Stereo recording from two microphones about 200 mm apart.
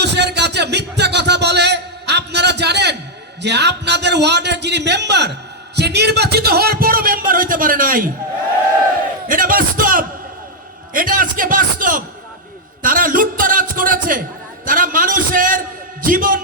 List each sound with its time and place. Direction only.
0.0 s music: 55° right (ahead or behind)
3.4 s a man's voice: 60° right (ahead or behind)
9.3 s a man's voice: 45° right (ahead or behind)